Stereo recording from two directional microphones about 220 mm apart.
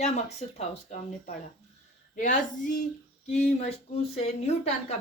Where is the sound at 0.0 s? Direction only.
30° left (ahead or behind).